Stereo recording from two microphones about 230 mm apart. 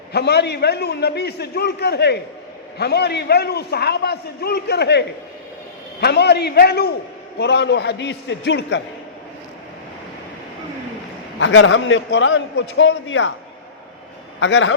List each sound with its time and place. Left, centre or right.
0.1 s a man's voice: left
11.3 s a man's voice: left
14.3 s a man's voice: left